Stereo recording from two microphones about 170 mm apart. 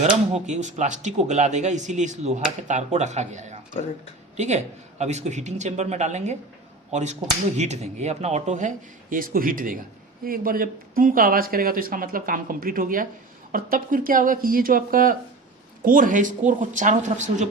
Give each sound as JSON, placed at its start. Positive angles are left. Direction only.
{"t": 0.4, "sound": "speech", "side_deg": -45}